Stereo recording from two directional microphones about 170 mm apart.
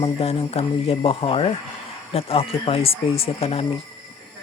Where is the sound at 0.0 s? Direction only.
35° left (ahead or behind).